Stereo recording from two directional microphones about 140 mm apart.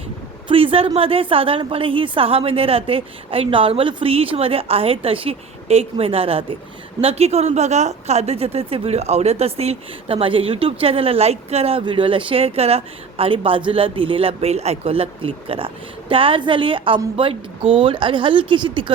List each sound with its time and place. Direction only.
0.4 s a woman's voice: 40° right (ahead or behind)